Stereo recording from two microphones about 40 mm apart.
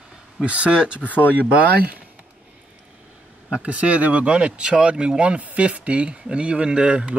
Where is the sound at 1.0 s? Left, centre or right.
Left.